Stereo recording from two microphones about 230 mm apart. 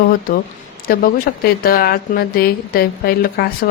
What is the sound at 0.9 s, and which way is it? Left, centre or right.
A woman's voice, left.